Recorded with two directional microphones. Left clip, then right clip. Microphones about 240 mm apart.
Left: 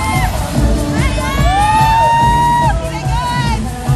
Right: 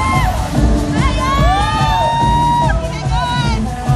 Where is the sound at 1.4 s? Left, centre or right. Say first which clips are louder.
Left 7 dB; right.